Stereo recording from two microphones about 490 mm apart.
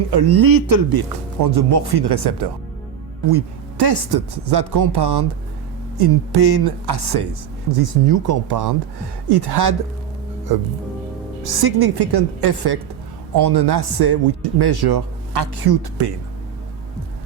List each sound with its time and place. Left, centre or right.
0.1 s speech: right